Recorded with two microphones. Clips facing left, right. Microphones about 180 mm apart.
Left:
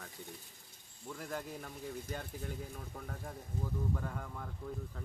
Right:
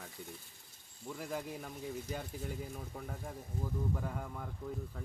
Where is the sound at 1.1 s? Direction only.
5° right (ahead or behind).